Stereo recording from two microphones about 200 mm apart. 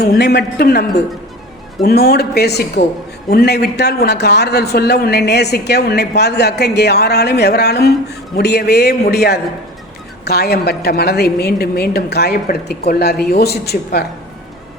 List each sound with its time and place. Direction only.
0.0 s a man's voice: 55° left (ahead or behind)